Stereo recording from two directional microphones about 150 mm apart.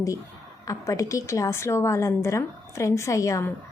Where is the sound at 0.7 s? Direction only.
20° left (ahead or behind).